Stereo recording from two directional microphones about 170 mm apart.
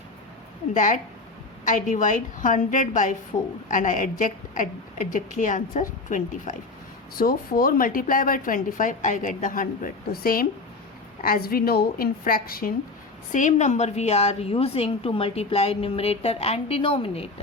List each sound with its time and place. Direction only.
0.7 s a woman's voice: 50° left (ahead or behind)
13.3 s a woman's voice: 45° left (ahead or behind)